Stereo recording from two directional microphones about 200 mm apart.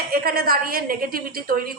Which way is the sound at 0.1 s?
50° right (ahead or behind).